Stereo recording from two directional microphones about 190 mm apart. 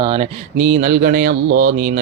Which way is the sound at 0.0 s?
30° right (ahead or behind).